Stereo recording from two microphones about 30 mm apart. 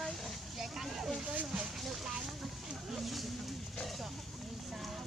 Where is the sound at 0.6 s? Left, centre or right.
Centre.